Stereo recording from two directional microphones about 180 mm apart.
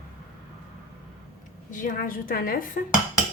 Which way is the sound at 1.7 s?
45° left (ahead or behind).